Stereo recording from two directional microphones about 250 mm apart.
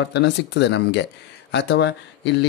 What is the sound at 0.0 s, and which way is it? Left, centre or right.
Speech, left.